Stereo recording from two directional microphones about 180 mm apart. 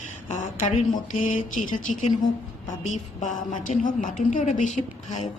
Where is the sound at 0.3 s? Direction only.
45° left (ahead or behind).